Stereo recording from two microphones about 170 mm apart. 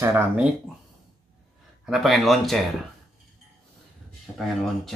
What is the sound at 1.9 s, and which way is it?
Speech, centre (ahead or behind).